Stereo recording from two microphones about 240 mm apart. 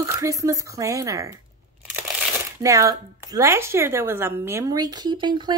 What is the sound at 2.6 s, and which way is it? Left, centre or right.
A woman's voice, centre.